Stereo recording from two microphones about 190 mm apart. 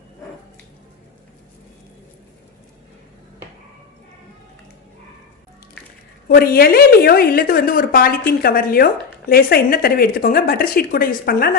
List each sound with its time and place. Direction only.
6.2 s speech: 50° left (ahead or behind)